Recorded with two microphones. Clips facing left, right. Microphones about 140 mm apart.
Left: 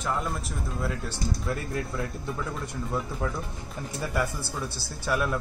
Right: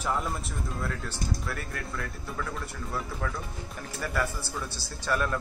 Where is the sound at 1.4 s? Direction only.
25° left (ahead or behind).